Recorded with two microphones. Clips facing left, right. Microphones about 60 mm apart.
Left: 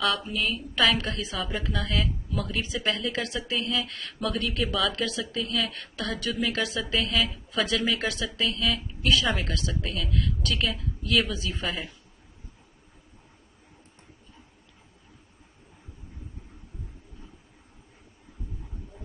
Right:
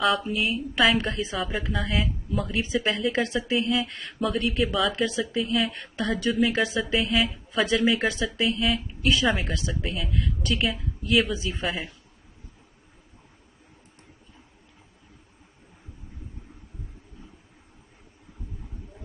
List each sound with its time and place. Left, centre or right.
0.0 s speech: centre
2.6 s speech: right
4.2 s speech: centre
4.9 s speech: centre
5.7 s speech: right
6.3 s speech: centre
9.3 s speech: centre
9.6 s speech: centre
11.6 s speech: centre